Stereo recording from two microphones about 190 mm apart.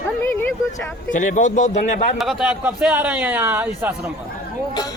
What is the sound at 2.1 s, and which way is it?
A man's voice, centre (ahead or behind).